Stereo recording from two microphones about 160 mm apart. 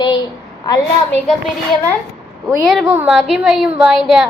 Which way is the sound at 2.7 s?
Centre (ahead or behind).